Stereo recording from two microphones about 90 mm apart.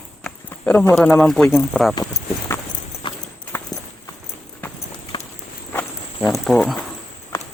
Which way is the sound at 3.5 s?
30° left (ahead or behind).